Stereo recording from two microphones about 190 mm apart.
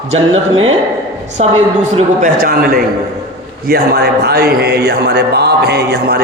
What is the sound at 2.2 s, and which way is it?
A man's voice, 50° right (ahead or behind).